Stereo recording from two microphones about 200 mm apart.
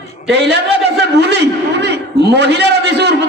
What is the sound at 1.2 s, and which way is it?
A man's voice, 60° right (ahead or behind).